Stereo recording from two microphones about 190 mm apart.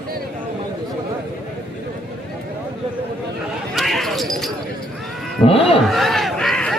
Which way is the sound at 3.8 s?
Centre (ahead or behind).